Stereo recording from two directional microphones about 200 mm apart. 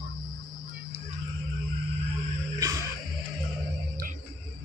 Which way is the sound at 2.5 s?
15° right (ahead or behind).